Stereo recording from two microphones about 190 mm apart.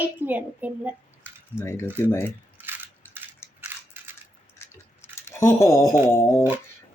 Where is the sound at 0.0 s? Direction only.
10° right (ahead or behind).